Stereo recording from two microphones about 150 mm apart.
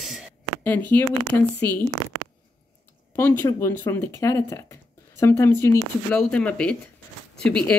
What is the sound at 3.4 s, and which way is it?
Speech, 15° left (ahead or behind).